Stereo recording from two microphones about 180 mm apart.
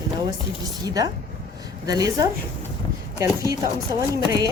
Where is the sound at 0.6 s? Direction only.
20° right (ahead or behind).